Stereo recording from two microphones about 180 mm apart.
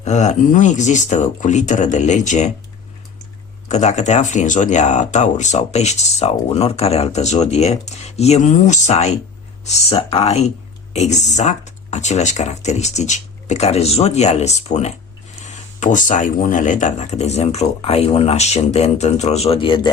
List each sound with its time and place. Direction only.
0.0 s speech: 40° left (ahead or behind)
3.7 s speech: 40° left (ahead or behind)